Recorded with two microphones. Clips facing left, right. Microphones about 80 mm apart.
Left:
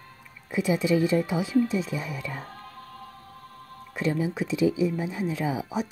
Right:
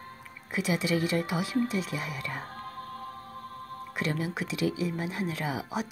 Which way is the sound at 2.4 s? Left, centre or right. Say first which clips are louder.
Right 2 dB; right.